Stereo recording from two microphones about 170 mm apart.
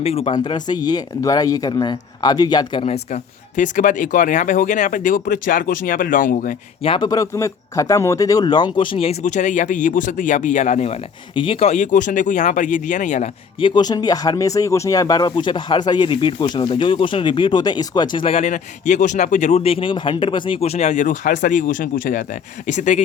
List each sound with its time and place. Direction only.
0.0 s speech: 35° left (ahead or behind); by 6.6 s 50° left (ahead or behind)
6.8 s speech: 30° left (ahead or behind); by 13.3 s 45° left (ahead or behind)
13.6 s speech: 30° left (ahead or behind); by 23.0 s 45° left (ahead or behind)